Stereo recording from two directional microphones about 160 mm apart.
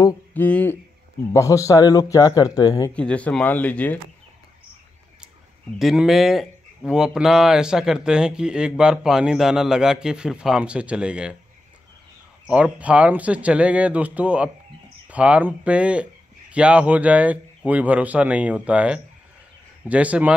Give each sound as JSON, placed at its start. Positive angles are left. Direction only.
{"t": 0.3, "sound": "speech", "side_deg": 10}
{"t": 2.9, "sound": "speech", "side_deg": 5}
{"t": 5.8, "sound": "speech", "side_deg": 0}
{"t": 12.4, "sound": "speech", "side_deg": -5}